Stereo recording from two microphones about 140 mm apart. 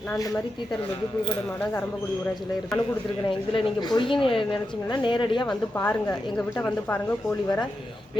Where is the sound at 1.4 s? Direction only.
10° left (ahead or behind).